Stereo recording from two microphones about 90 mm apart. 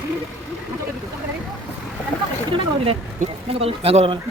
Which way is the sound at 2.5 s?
90° right.